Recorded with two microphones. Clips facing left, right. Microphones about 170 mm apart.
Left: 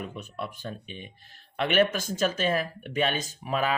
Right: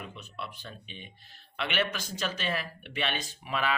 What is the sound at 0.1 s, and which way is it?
Speech, 50° left (ahead or behind).